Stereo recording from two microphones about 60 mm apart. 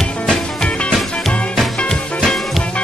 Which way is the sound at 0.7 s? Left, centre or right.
Centre.